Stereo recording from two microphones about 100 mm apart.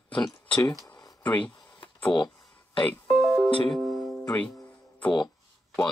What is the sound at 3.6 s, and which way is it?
Music, centre (ahead or behind).